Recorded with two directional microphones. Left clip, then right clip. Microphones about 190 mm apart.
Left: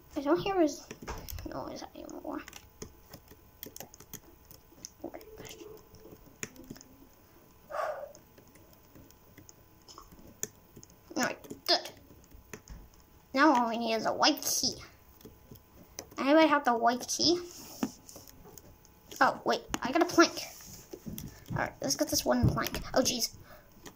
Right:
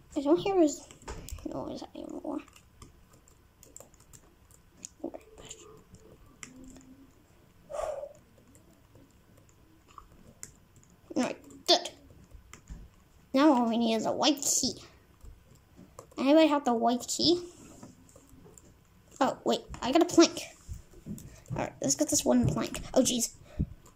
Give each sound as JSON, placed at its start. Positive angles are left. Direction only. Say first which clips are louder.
{"t": 0.1, "sound": "speech", "louder": "right 3 dB", "side_deg": -25}
{"t": 11.1, "sound": "a sound", "louder": "even", "side_deg": -30}
{"t": 13.3, "sound": "a woman's voice", "louder": "right 1 dB", "side_deg": -30}
{"t": 16.2, "sound": "speech", "louder": "right 1 dB", "side_deg": -25}
{"t": 19.1, "sound": "a sound", "louder": "left 1 dB", "side_deg": -30}
{"t": 19.8, "sound": "speech", "louder": "right 3 dB", "side_deg": -30}
{"t": 21.5, "sound": "speech", "louder": "right 1 dB", "side_deg": -35}